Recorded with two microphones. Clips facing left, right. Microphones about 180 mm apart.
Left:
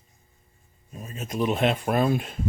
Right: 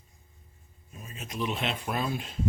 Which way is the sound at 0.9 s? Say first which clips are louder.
Left 7 dB; 40° left (ahead or behind).